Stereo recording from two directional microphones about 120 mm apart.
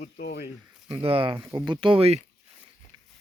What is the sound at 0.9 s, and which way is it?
Speech, 50° right (ahead or behind).